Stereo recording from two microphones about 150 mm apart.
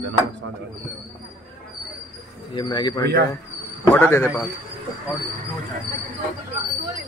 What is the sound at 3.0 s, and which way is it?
Speech, 90° right.